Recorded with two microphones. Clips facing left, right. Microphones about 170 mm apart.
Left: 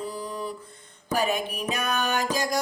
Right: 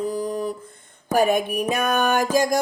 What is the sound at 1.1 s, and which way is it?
Music, 50° right (ahead or behind).